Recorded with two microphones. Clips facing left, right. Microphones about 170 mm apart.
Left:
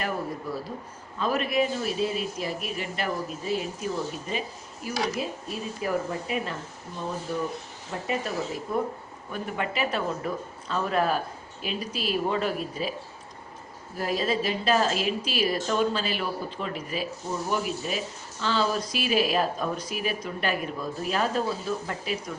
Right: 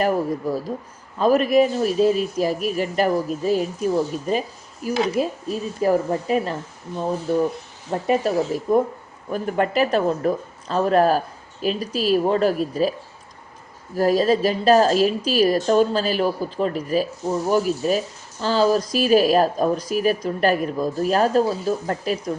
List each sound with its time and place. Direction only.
0.4 s speech: 40° right (ahead or behind)
7.9 s speech: 40° right (ahead or behind)
13.9 s speech: 40° right (ahead or behind)